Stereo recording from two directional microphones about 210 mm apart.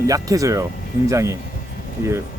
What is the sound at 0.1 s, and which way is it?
Speech, 15° right (ahead or behind).